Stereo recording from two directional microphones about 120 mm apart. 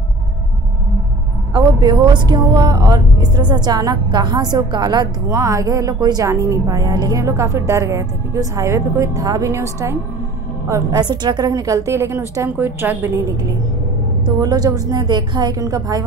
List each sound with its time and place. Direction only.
1.5 s speech: 35° right (ahead or behind)
10.7 s a woman's voice: 35° right (ahead or behind); by 13.2 s 15° right (ahead or behind)
14.4 s speech: 35° right (ahead or behind)